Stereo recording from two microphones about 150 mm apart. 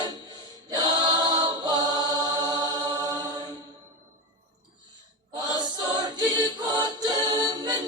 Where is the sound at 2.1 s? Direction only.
25° right (ahead or behind).